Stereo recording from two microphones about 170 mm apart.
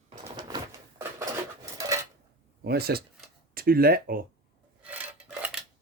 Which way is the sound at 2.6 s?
65° right (ahead or behind).